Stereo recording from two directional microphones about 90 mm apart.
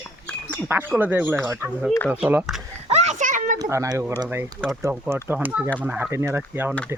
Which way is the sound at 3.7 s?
35° right (ahead or behind).